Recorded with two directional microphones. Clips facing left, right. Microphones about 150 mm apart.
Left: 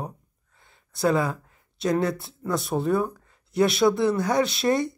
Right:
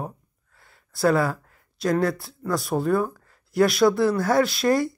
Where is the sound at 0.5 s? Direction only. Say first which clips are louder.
Right 2 dB; 20° left (ahead or behind).